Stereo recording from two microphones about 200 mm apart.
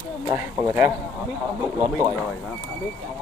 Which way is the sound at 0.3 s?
15° right (ahead or behind).